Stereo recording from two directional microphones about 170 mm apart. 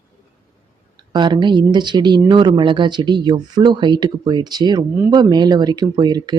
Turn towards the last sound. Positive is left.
turn(degrees=-25)  # may be behind; listen again after turning